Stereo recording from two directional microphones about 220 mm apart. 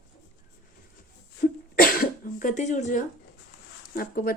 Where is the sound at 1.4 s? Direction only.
40° left (ahead or behind).